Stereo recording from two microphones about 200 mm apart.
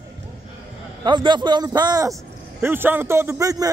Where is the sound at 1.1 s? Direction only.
25° right (ahead or behind).